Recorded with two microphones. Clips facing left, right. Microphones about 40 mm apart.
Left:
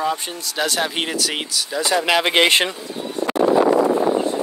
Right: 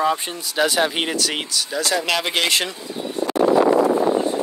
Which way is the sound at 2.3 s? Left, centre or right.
Left.